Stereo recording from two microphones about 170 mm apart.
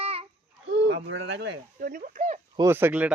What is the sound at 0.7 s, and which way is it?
Speech, 90° right.